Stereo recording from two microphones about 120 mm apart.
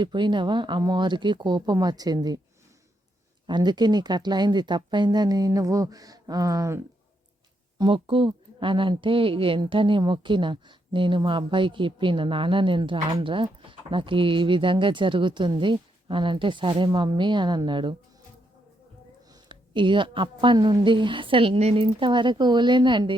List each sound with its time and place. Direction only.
0.0 s speech: 40° right (ahead or behind)
3.4 s speech: 35° right (ahead or behind)
7.8 s speech: 45° right (ahead or behind)
19.3 s speech: 40° right (ahead or behind)